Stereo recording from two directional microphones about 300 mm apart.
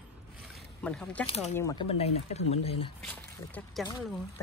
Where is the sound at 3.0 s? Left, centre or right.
Centre.